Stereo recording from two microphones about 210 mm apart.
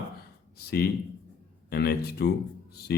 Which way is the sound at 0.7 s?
50° left (ahead or behind).